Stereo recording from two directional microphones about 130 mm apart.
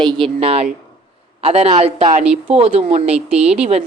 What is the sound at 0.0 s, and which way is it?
Speech, 40° right (ahead or behind).